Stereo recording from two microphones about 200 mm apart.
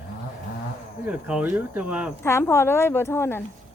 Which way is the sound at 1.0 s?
5° right (ahead or behind).